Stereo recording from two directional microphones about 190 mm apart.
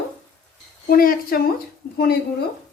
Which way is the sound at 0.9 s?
50° left (ahead or behind).